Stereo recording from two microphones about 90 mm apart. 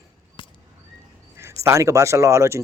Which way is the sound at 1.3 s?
30° right (ahead or behind).